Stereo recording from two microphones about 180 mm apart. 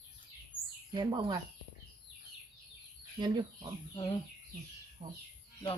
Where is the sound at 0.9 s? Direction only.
25° right (ahead or behind).